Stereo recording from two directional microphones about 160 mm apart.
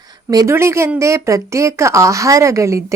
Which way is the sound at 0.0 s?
25° right (ahead or behind).